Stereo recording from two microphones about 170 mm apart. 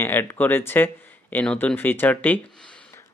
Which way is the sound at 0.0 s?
15° left (ahead or behind).